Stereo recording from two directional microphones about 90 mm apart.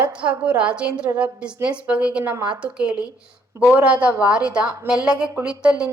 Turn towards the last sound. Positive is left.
turn(degrees=-10)  # may be behind; listen again after turning